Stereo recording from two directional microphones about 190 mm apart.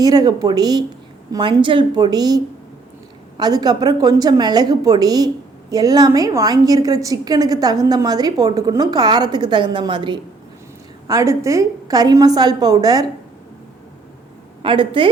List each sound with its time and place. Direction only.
0.0 s a woman's voice: 20° right (ahead or behind)
14.6 s a woman's voice: 25° right (ahead or behind)